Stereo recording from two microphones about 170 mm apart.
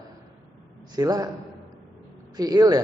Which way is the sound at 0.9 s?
20° right (ahead or behind).